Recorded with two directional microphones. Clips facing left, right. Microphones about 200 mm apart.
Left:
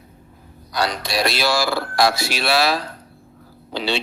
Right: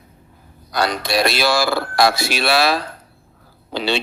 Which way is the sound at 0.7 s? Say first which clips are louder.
Right 3 dB; 55° right (ahead or behind).